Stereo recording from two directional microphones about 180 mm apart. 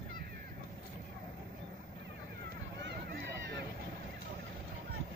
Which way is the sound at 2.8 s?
70° right (ahead or behind).